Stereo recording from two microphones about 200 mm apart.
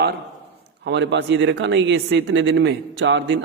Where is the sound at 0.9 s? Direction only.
60° right (ahead or behind).